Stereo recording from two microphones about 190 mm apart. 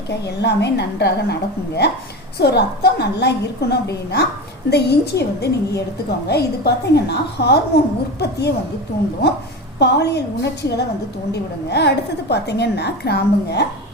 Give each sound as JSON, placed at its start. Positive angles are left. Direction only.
{"t": 0.1, "sound": "a woman's voice", "side_deg": 60}
{"t": 9.7, "sound": "a woman's voice", "side_deg": 60}